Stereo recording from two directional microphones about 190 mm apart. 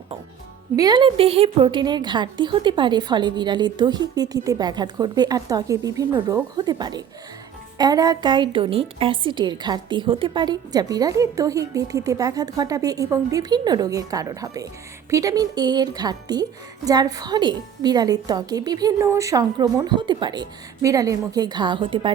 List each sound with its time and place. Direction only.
0.8 s a woman's voice: 20° right (ahead or behind)